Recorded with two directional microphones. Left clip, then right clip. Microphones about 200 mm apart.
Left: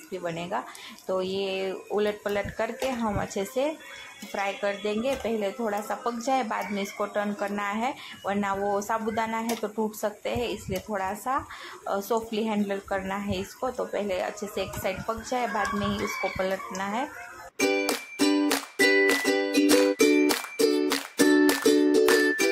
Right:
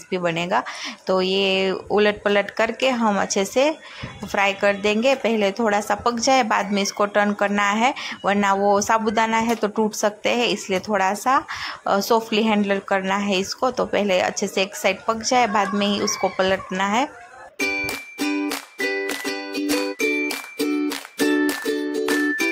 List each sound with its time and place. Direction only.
0.1 s a woman's voice: 35° right (ahead or behind)
17.6 s music: 5° left (ahead or behind)